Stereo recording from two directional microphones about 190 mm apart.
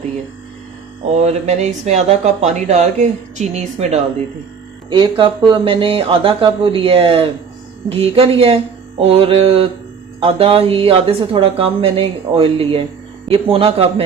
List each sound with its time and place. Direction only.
1.2 s speech: 35° right (ahead or behind)